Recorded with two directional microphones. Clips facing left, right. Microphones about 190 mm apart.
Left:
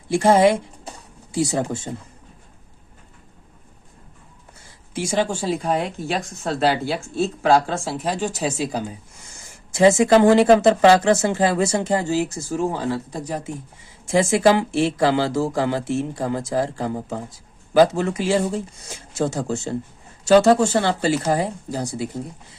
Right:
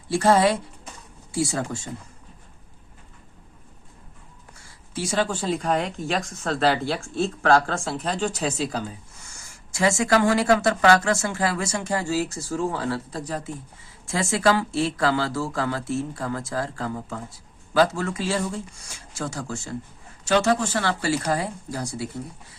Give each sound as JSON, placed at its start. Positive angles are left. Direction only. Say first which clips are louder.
{"t": 0.1, "sound": "speech", "louder": "left 4 dB", "side_deg": 15}
{"t": 4.6, "sound": "speech", "louder": "left 3 dB", "side_deg": 15}